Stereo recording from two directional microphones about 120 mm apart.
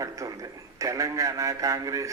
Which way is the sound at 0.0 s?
30° right (ahead or behind).